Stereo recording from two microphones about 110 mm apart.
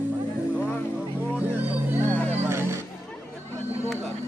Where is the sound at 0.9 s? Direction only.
15° right (ahead or behind).